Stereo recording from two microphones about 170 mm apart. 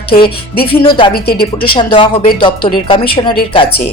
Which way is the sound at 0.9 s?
30° left (ahead or behind).